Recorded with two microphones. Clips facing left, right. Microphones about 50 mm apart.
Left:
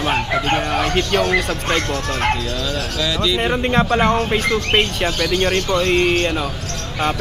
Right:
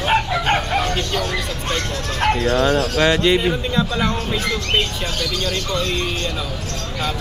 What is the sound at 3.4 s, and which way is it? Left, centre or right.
Speech, left.